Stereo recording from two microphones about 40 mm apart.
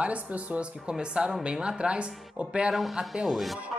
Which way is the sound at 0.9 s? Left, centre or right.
Right.